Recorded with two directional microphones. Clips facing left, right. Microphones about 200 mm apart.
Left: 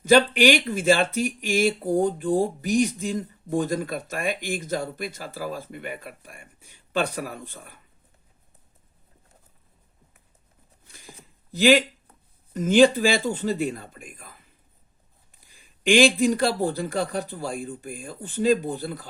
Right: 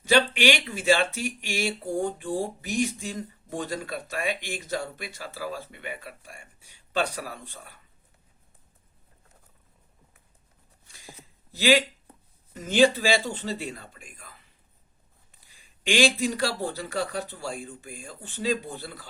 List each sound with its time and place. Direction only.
0.0 s speech: 50° left (ahead or behind)
11.1 s a sound: 50° left (ahead or behind)
12.5 s speech: 50° left (ahead or behind)
15.4 s speech: 50° left (ahead or behind)